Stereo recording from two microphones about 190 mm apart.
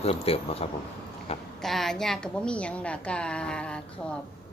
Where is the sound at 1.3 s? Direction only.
30° left (ahead or behind).